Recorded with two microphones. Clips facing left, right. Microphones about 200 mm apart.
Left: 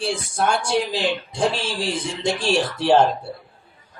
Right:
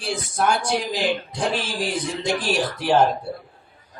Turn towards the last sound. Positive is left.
turn(degrees=30)  # may be behind; listen again after turning